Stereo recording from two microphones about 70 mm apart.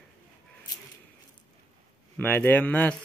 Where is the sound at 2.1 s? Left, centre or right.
Left.